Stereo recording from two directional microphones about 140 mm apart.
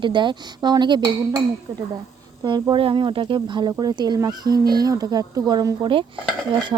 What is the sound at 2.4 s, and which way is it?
Speech, 35° right (ahead or behind).